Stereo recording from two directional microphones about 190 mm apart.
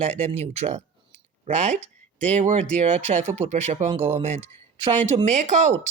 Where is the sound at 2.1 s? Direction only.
35° right (ahead or behind).